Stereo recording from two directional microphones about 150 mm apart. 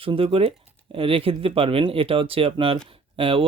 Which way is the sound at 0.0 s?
35° right (ahead or behind).